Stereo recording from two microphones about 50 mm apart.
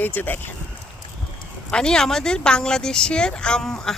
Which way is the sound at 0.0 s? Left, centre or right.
Left.